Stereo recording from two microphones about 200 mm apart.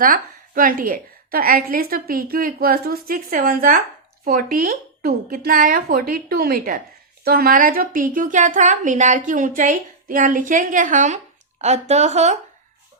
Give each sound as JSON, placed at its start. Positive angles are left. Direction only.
{"t": 0.0, "sound": "a woman's voice", "side_deg": -45}